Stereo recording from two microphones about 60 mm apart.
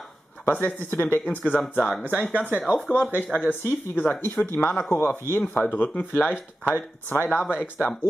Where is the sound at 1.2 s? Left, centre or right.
Left.